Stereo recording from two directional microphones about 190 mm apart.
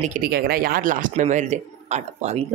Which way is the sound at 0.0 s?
45° right (ahead or behind).